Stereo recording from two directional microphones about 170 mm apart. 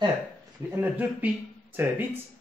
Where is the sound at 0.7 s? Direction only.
10° right (ahead or behind).